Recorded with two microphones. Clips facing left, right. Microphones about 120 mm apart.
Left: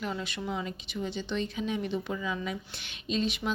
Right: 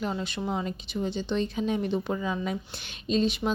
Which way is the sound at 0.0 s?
30° right (ahead or behind).